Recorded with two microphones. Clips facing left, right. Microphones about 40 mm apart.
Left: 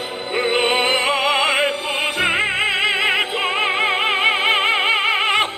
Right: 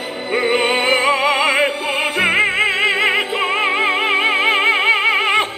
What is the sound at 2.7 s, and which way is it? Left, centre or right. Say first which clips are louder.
Music: right 2 dB; left.